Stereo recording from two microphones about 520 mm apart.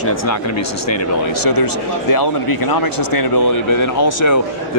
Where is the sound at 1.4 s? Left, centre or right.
Left.